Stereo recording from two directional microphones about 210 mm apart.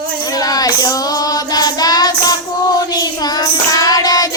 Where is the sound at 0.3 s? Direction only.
15° left (ahead or behind).